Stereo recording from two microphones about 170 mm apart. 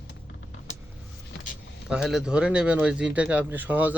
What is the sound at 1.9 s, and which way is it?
Speech, 5° right (ahead or behind).